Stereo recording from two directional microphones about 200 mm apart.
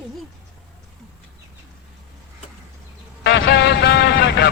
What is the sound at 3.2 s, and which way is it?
Vehicle, 60° left (ahead or behind).